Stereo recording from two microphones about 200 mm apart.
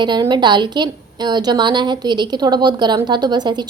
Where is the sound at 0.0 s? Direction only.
20° right (ahead or behind).